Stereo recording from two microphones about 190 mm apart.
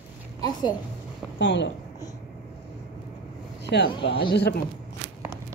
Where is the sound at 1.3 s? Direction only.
70° left (ahead or behind).